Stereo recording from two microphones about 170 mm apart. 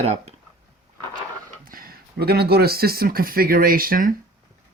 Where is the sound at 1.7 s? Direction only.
60° right (ahead or behind).